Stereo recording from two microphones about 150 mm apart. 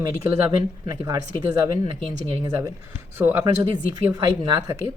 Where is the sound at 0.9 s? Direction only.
25° right (ahead or behind).